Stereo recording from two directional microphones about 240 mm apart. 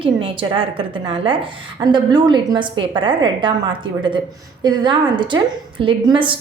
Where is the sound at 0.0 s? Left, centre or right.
Right.